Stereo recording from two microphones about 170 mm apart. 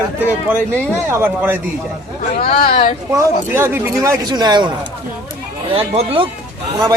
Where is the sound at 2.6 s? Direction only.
65° left (ahead or behind).